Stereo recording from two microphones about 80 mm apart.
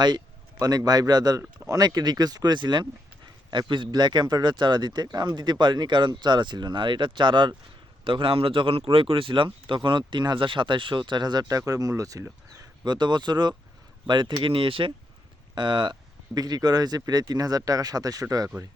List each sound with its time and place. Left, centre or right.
0.6 s speech: right
3.5 s speech: right
8.0 s speech: right
10.1 s speech: right
12.8 s speech: right
15.5 s speech: right